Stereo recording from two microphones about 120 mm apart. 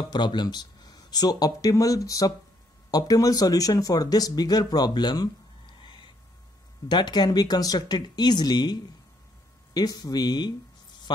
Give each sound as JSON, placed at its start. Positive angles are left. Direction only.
{"t": 0.1, "sound": "speech", "side_deg": 40}
{"t": 9.8, "sound": "speech", "side_deg": 35}